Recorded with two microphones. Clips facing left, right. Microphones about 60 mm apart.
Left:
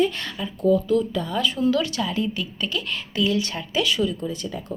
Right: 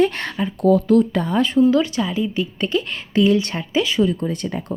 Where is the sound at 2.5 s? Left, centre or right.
Right.